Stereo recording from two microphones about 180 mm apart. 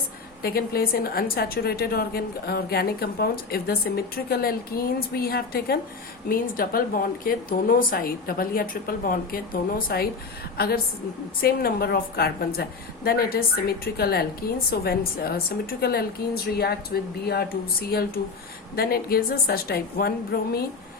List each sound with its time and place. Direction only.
0.4 s a woman's voice: 60° left (ahead or behind)
11.3 s a woman's voice: 55° left (ahead or behind)